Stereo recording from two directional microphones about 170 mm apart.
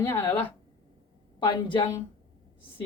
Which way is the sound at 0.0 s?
15° left (ahead or behind).